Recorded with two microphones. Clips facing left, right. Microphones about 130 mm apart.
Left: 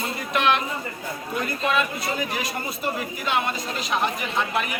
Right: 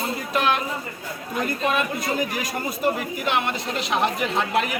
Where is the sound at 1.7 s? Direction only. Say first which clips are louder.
Left 1 dB; 45° right (ahead or behind).